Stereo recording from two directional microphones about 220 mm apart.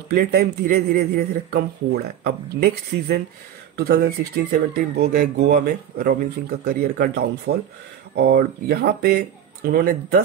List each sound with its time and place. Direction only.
0.1 s speech: 45° right (ahead or behind)